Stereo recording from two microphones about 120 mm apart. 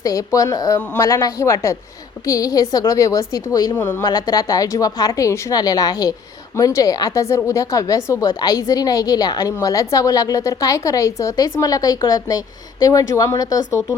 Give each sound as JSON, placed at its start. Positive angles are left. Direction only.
{"t": 0.0, "sound": "a woman's voice", "side_deg": 25}
{"t": 3.8, "sound": "a woman's voice", "side_deg": 15}
{"t": 4.0, "sound": "a woman's voice", "side_deg": 35}